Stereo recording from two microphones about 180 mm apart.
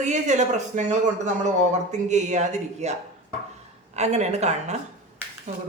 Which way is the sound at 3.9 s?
40° right (ahead or behind).